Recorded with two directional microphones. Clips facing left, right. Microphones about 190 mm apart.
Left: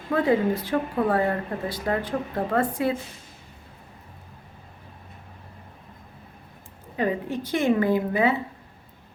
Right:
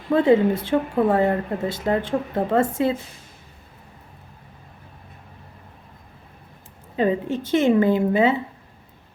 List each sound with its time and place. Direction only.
0.1 s a woman's voice: 25° right (ahead or behind)
6.9 s a woman's voice: 25° right (ahead or behind)